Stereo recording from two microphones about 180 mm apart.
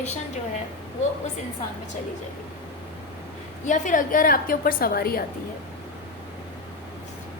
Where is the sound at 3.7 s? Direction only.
45° left (ahead or behind).